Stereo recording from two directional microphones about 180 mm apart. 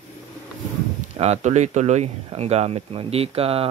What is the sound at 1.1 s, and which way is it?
Speech, 35° right (ahead or behind).